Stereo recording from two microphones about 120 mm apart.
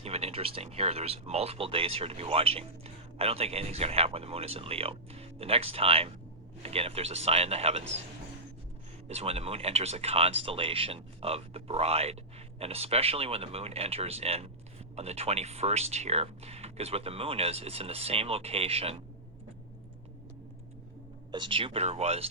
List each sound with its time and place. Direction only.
0.0 s speech: 55° right (ahead or behind)
9.0 s speech: 60° right (ahead or behind)
21.3 s speech: 45° right (ahead or behind)